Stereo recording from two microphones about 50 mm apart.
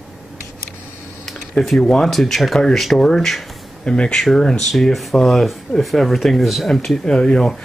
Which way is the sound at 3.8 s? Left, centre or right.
Centre.